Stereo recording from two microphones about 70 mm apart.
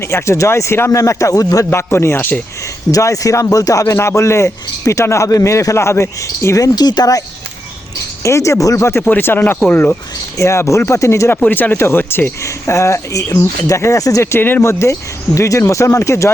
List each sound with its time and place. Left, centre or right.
0.0 s speech: left
1.7 s speech: left
2.9 s speech: left
3.9 s speech: left
6.7 s speech: left
8.2 s speech: left
9.0 s speech: left
10.3 s speech: left
11.3 s speech: left
11.8 s speech: left
12.5 s speech: left